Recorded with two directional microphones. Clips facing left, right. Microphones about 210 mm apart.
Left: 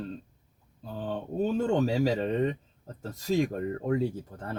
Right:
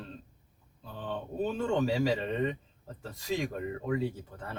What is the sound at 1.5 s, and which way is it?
Speech, 45° left (ahead or behind).